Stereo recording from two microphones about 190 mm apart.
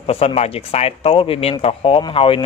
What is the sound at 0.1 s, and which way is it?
Speech, 30° left (ahead or behind).